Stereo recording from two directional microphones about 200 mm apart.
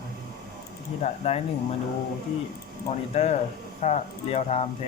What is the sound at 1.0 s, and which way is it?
Speech, 30° left (ahead or behind).